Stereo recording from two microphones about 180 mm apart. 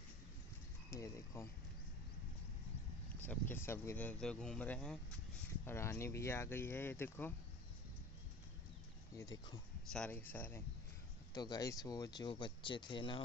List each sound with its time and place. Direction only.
0.8 s speech: 15° left (ahead or behind)
3.3 s speech: 10° left (ahead or behind)
9.1 s speech: 20° left (ahead or behind)
9.9 s speech: 10° left (ahead or behind)
11.3 s speech: 20° left (ahead or behind)